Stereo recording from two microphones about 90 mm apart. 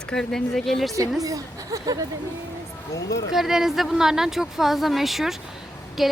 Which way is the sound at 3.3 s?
5° right (ahead or behind).